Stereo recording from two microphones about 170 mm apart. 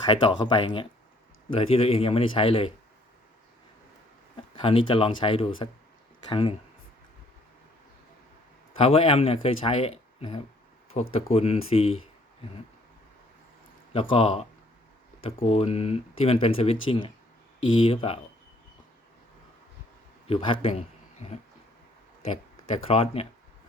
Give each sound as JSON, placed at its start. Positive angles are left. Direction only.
{"t": 0.0, "sound": "speech", "side_deg": 25}
{"t": 4.5, "sound": "speech", "side_deg": 30}
{"t": 8.8, "sound": "speech", "side_deg": 35}
{"t": 13.9, "sound": "speech", "side_deg": 30}
{"t": 20.2, "sound": "speech", "side_deg": 35}